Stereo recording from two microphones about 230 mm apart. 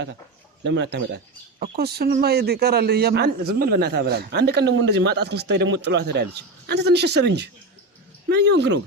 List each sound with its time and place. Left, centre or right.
0.6 s a man's voice: right